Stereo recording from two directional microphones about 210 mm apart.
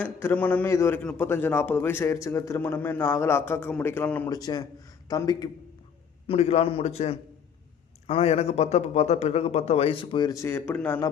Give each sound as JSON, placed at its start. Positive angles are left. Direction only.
{"t": 0.0, "sound": "a man's voice", "side_deg": 10}
{"t": 6.2, "sound": "a man's voice", "side_deg": 30}